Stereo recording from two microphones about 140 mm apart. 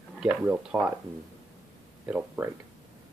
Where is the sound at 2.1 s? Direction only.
15° right (ahead or behind).